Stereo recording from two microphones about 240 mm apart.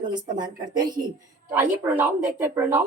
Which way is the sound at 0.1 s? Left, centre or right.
Centre.